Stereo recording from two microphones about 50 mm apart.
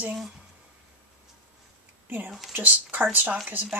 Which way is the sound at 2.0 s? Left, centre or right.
Right.